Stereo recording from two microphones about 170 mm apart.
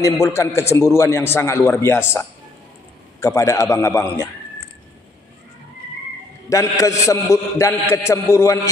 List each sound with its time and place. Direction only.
0.0 s a man's voice: 15° left (ahead or behind)
6.5 s a man's voice: 20° left (ahead or behind)